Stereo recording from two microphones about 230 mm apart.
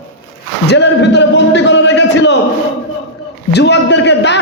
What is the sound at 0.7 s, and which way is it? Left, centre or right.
A man's voice, left.